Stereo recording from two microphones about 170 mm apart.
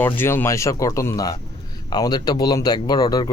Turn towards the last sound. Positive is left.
turn(degrees=25)  # may be behind; listen again after turning